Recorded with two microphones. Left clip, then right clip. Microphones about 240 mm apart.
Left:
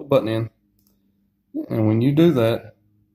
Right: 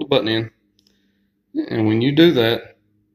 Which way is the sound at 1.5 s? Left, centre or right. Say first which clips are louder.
Right 3 dB; left.